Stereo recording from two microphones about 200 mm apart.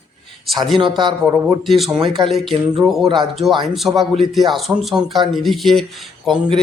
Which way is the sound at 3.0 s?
20° right (ahead or behind).